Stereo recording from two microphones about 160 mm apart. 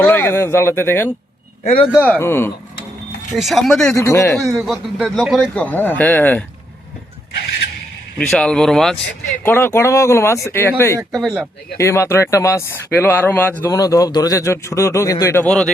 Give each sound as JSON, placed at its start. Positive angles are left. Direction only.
{"t": 0.0, "sound": "speech", "side_deg": 15}
{"t": 1.6, "sound": "speech", "side_deg": 35}
{"t": 2.0, "sound": "speech", "side_deg": 10}
{"t": 3.3, "sound": "speech", "side_deg": 0}
{"t": 3.9, "sound": "speech", "side_deg": 15}
{"t": 4.6, "sound": "speech", "side_deg": 0}
{"t": 8.3, "sound": "speech", "side_deg": 5}
{"t": 9.4, "sound": "speech", "side_deg": 15}
{"t": 11.2, "sound": "speech", "side_deg": 0}
{"t": 11.8, "sound": "speech", "side_deg": 15}